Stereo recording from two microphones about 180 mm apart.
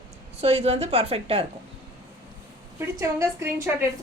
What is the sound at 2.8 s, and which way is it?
A woman's voice, 15° right (ahead or behind).